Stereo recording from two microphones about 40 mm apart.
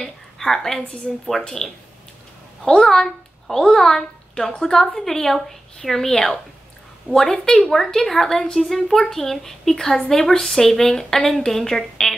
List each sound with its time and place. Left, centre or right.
0.0 s a sound: centre
1.1 s speech: centre
2.8 s a child's voice: centre
7.1 s a woman's voice: right
7.7 s speech: centre